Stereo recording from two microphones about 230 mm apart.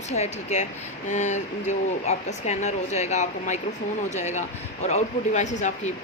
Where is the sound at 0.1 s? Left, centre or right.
Left.